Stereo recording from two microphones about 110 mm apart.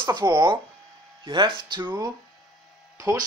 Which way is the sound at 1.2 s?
45° right (ahead or behind).